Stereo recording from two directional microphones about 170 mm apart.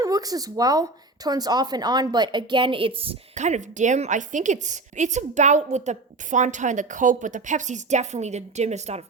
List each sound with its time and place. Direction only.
0.0 s speech: 20° right (ahead or behind); by 9.0 s 40° right (ahead or behind)